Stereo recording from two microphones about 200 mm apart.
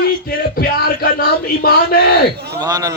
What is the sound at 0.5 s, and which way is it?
Speech, 50° left (ahead or behind).